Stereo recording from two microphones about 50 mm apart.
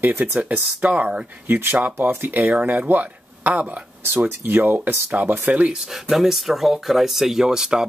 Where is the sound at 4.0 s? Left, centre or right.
Right.